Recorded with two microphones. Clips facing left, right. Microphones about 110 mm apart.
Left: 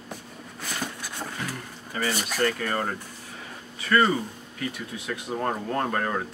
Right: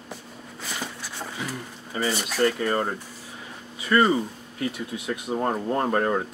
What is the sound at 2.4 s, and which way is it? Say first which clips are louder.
Speech: right 4 dB; 15° right (ahead or behind).